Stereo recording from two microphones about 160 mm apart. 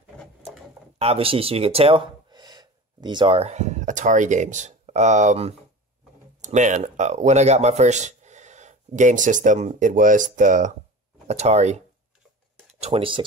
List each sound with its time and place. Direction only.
0.9 s speech: 40° right (ahead or behind)
12.8 s speech: 35° right (ahead or behind)